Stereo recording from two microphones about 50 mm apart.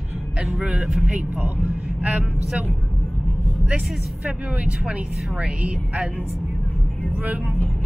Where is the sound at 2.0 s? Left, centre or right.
Right.